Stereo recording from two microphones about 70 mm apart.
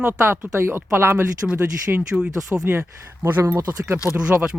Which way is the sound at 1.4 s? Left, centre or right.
Centre.